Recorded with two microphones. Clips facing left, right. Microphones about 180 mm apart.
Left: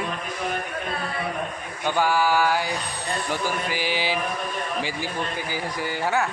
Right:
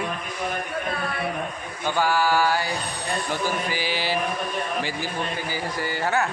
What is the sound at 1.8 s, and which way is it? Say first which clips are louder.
Speech: left 1 dB; 15° left (ahead or behind).